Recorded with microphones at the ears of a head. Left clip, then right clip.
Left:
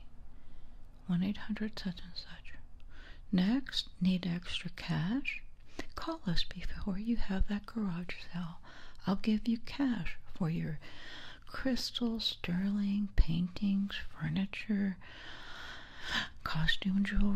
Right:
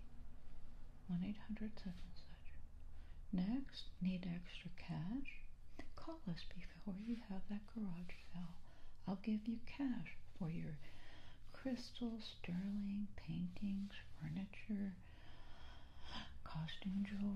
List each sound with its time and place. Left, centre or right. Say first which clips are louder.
1.0 s speech: left 12 dB; left